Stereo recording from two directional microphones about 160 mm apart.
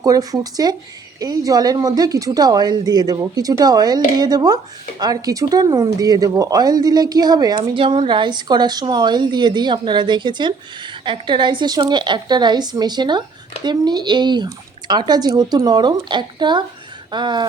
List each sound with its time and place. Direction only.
0.0 s speech: 20° right (ahead or behind)